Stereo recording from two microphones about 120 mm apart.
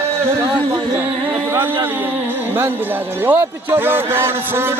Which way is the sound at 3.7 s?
20° right (ahead or behind).